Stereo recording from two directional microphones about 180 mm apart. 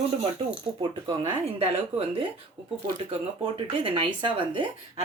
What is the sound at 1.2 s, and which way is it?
Speech, 35° right (ahead or behind).